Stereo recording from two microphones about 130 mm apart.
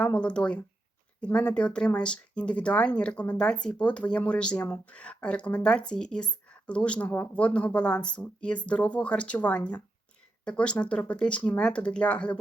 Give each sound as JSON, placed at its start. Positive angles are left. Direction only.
{"t": 0.0, "sound": "speech", "side_deg": 10}